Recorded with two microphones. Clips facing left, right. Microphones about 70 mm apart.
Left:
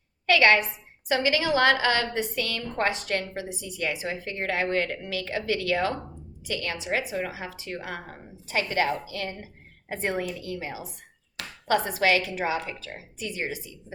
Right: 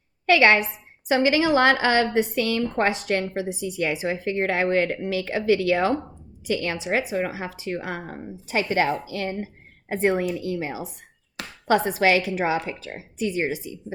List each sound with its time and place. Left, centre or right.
0.3 s a woman's voice: right